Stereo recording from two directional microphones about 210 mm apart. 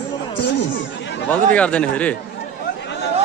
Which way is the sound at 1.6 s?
5° left (ahead or behind).